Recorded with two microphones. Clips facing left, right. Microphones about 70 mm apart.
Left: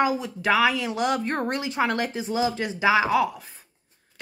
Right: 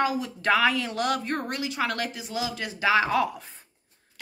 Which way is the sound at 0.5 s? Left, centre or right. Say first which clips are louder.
Left 2 dB; centre.